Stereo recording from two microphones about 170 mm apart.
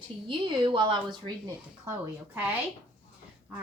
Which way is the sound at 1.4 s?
15° right (ahead or behind).